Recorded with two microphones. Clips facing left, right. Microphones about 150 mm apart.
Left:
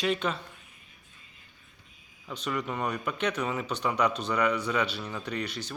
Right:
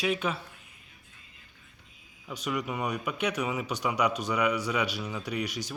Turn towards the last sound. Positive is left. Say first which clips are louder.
# right 1 dB
turn(degrees=-10)  # may be behind; listen again after turning